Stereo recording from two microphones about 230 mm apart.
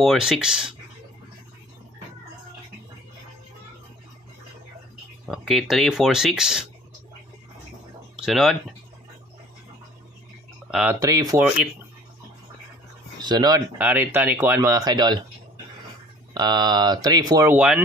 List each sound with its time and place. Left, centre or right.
0.0 s speech: centre
5.3 s speech: centre
8.2 s speech: centre
10.7 s speech: centre
11.0 s speech: centre
13.2 s speech: centre
13.7 s speech: centre
16.3 s speech: centre